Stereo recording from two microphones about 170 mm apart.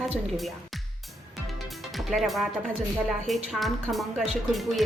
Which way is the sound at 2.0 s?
Centre (ahead or behind).